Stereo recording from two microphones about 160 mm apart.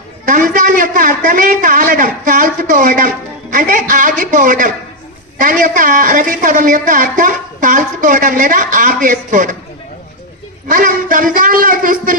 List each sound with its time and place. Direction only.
0.3 s a woman's voice: 55° right (ahead or behind)
10.7 s a woman's voice: 55° right (ahead or behind)